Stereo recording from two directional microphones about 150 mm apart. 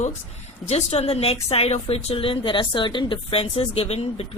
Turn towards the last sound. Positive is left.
turn(degrees=40)  # may be behind; listen again after turning